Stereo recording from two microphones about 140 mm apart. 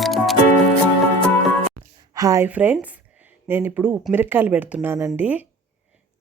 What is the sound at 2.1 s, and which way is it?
Speech, 25° right (ahead or behind).